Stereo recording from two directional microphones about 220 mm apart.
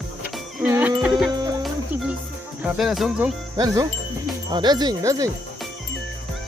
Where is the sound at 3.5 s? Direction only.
15° right (ahead or behind).